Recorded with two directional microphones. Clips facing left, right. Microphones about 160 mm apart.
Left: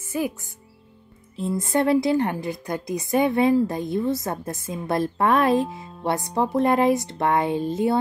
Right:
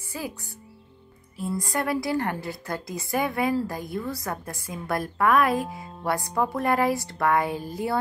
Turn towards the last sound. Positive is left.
turn(degrees=25)  # may be behind; listen again after turning